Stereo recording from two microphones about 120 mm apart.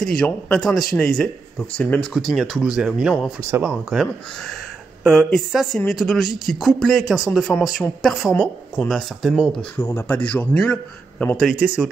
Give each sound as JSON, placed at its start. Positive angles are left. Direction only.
{"t": 0.0, "sound": "a man's voice", "side_deg": 5}
{"t": 2.3, "sound": "speech", "side_deg": 0}
{"t": 3.3, "sound": "speech", "side_deg": -20}
{"t": 3.6, "sound": "a man's voice", "side_deg": 0}
{"t": 9.8, "sound": "a man's voice", "side_deg": 20}
{"t": 11.4, "sound": "speech", "side_deg": -5}